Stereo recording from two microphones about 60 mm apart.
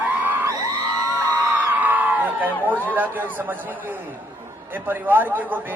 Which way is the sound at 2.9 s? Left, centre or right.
Right.